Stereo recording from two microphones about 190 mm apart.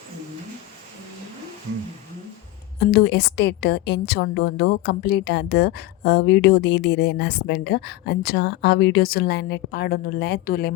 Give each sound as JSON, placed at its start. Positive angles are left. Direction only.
{"t": 2.8, "sound": "a woman's voice", "side_deg": 60}